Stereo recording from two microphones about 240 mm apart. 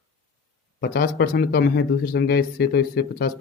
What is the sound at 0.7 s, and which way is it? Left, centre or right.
Speech, left.